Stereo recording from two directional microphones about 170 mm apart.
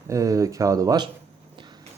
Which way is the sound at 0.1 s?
20° right (ahead or behind).